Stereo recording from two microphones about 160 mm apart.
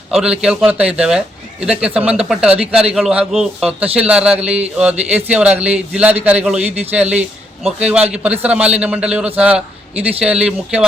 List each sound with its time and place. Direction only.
0.1 s a man's voice: 5° right (ahead or behind)